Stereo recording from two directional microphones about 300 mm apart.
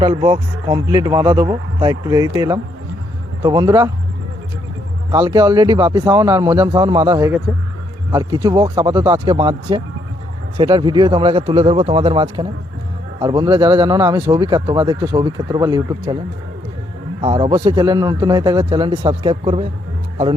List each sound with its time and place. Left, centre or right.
0.0 s speech: centre
5.1 s speech: centre
17.2 s speech: centre